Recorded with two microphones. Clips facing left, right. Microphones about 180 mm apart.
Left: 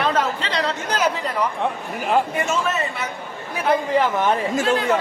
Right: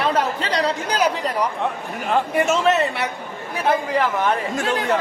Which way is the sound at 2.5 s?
70° right (ahead or behind).